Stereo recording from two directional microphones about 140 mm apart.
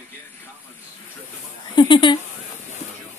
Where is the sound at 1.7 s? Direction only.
35° left (ahead or behind).